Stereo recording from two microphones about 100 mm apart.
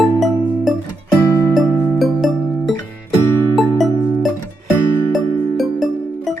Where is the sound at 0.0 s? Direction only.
Centre (ahead or behind).